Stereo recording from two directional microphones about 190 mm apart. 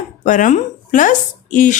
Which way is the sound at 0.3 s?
45° left (ahead or behind).